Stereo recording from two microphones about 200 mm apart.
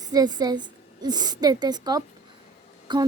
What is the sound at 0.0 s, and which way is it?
A woman's voice, 20° right (ahead or behind).